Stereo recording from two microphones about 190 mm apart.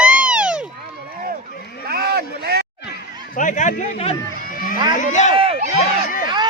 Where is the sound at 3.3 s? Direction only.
40° left (ahead or behind).